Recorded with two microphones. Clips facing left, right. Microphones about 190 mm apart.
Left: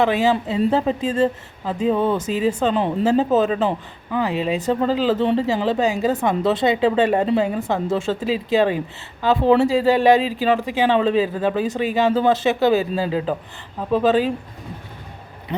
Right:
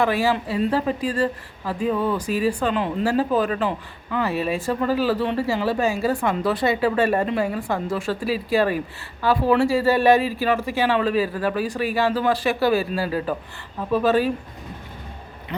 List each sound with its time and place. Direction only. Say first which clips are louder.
0.0 s speech: left 3 dB; 20° left (ahead or behind)